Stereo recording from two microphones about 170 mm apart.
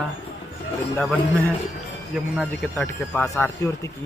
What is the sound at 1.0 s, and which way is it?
Speech, 5° left (ahead or behind).